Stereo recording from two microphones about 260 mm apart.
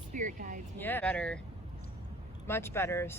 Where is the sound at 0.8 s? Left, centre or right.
Centre.